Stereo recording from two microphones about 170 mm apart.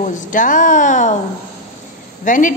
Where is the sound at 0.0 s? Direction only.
50° left (ahead or behind).